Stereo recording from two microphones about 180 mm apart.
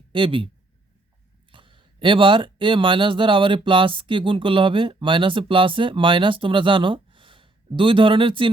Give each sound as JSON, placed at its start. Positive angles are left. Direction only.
{"t": 0.1, "sound": "speech", "side_deg": -30}
{"t": 1.5, "sound": "speech", "side_deg": -25}